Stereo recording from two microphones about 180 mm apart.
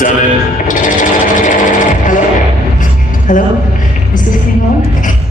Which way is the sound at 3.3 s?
45° left (ahead or behind).